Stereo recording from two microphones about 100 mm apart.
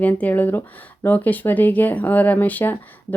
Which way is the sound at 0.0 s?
15° left (ahead or behind).